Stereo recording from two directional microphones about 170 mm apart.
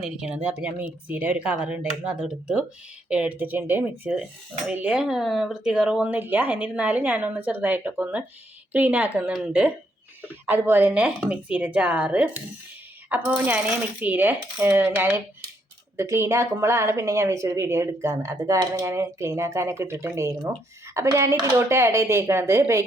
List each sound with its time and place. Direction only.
0.0 s a woman's voice: 5° right (ahead or behind)